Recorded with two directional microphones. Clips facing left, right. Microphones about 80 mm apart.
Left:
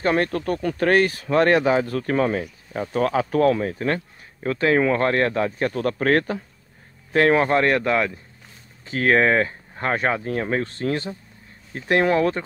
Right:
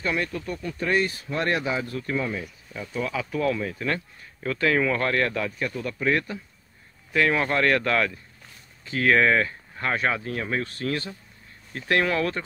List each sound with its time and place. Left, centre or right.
0.0 s speech: left
5.8 s speech: left
7.1 s speech: left; by 8.2 s centre
8.8 s speech: left